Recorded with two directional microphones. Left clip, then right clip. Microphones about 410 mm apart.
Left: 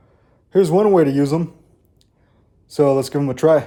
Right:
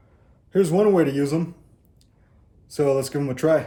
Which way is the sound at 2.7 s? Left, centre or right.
Centre.